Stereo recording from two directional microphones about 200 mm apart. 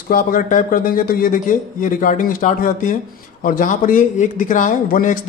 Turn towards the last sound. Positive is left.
turn(degrees=40)  # may be behind; listen again after turning